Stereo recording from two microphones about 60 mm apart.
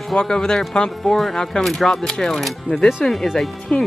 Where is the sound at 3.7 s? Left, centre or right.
Left.